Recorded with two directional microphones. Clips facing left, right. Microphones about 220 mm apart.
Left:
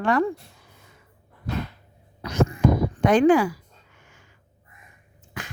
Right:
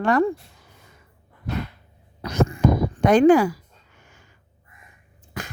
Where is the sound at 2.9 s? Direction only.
40° right (ahead or behind).